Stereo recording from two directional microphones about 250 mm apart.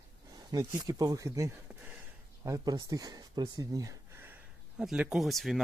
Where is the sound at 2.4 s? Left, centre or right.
Centre.